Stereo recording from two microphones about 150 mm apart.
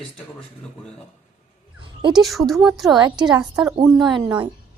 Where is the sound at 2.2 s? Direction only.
Centre (ahead or behind).